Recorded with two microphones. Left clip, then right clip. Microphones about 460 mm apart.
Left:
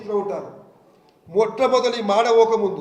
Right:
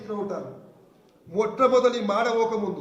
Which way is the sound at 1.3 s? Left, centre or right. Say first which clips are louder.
Left 3 dB; centre.